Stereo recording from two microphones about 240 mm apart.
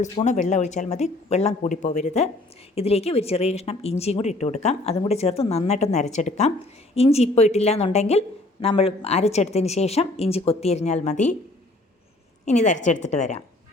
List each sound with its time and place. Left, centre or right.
0.0 s speech: left
12.5 s speech: left